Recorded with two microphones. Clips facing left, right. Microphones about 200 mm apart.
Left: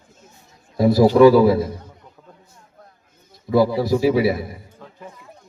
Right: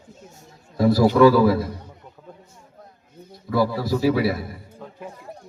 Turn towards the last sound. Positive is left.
turn(degrees=20)  # may be behind; listen again after turning